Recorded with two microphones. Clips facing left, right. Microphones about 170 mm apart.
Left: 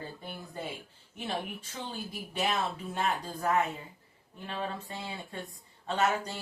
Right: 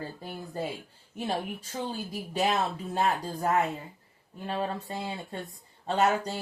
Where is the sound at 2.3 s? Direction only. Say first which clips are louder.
Right 4 dB; 35° right (ahead or behind).